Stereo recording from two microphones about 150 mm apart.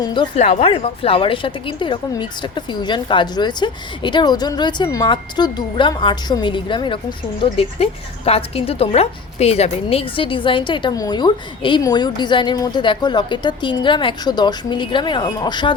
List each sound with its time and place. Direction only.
0.0 s a woman's voice: 30° left (ahead or behind)
0.3 s a woman's voice: 45° left (ahead or behind); by 15.7 s 30° left (ahead or behind)